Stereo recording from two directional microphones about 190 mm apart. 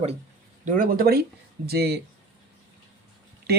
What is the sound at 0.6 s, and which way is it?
Speech, 45° right (ahead or behind).